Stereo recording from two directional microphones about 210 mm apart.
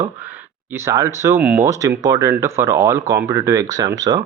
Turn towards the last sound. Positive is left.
turn(degrees=-20)  # may be behind; listen again after turning